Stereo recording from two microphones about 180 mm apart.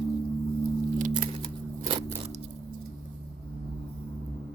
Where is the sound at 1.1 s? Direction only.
25° right (ahead or behind).